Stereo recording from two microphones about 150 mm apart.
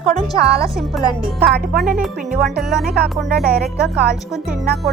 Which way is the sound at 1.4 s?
90° right.